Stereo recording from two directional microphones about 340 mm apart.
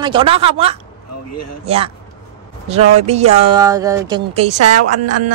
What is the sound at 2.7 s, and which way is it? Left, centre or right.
Speech, centre.